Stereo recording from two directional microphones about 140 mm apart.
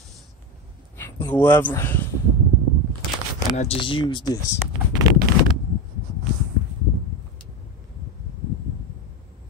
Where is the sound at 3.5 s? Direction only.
55° left (ahead or behind).